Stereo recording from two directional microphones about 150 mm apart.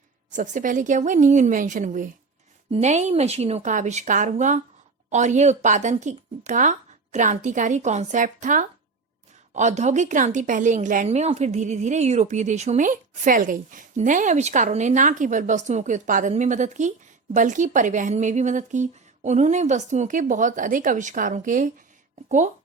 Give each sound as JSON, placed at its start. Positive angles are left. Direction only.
{"t": 0.3, "sound": "a woman's voice", "side_deg": -55}